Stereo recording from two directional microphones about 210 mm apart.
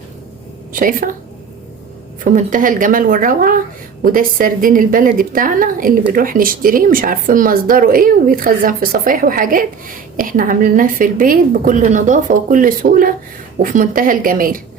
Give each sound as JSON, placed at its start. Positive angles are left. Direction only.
{"t": 0.7, "sound": "a woman's voice", "side_deg": -40}
{"t": 2.2, "sound": "speech", "side_deg": -40}